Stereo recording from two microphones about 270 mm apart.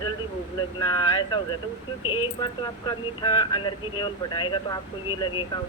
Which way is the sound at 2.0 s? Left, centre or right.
Centre.